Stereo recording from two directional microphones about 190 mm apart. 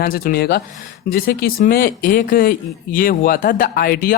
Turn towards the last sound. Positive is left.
turn(degrees=50)  # may be behind; listen again after turning